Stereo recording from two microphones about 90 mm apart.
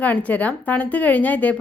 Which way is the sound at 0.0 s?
15° left (ahead or behind).